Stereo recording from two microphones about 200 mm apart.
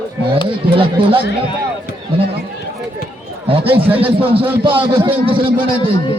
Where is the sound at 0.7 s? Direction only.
25° right (ahead or behind).